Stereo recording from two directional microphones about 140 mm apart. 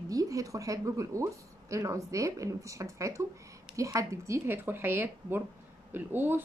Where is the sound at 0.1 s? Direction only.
25° right (ahead or behind).